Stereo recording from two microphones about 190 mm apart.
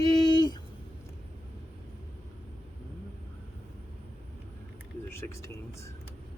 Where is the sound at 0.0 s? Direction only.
20° left (ahead or behind).